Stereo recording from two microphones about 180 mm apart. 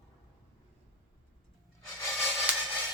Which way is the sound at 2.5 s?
10° right (ahead or behind).